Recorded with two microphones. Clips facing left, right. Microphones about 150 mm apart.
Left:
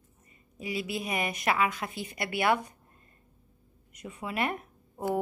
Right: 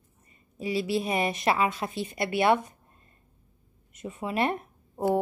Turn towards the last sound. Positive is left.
turn(degrees=-35)  # may be behind; listen again after turning